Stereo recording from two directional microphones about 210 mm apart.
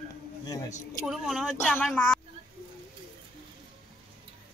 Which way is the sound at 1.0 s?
Centre (ahead or behind).